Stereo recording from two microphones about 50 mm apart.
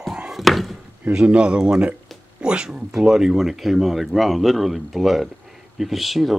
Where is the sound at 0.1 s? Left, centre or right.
Centre.